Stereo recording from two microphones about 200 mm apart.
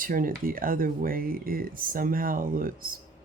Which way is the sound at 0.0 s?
45° right (ahead or behind).